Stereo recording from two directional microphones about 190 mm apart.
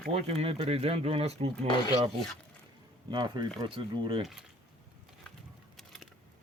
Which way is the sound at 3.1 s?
25° right (ahead or behind).